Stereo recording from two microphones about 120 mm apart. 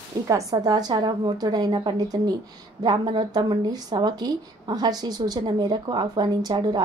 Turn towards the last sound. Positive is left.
turn(degrees=-35)  # may be behind; listen again after turning